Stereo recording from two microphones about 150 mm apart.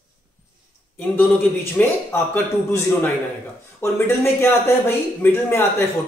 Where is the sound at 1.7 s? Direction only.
15° left (ahead or behind).